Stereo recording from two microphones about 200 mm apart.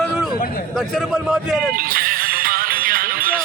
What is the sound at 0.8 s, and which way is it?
Speech, centre (ahead or behind).